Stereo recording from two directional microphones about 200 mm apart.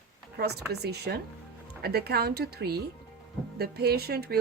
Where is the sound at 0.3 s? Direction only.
55° right (ahead or behind).